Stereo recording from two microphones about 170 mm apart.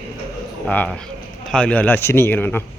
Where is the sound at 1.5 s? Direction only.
5° left (ahead or behind).